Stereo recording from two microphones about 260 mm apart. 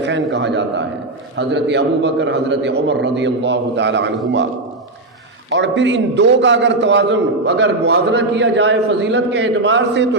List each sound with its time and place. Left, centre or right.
0.0 s a sound: right
1.4 s a man's voice: right
5.5 s a man's voice: right